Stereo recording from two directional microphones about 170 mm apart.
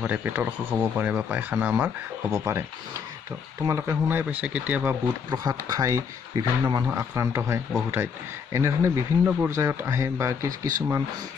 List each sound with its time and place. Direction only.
0.0 s speech: 10° right (ahead or behind)
3.6 s speech: 15° right (ahead or behind)
5.0 s speech: 20° right (ahead or behind)